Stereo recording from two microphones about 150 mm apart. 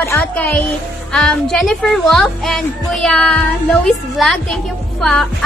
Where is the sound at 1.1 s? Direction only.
Centre (ahead or behind).